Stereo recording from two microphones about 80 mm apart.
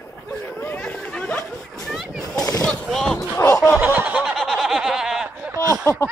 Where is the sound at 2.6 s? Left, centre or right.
Centre.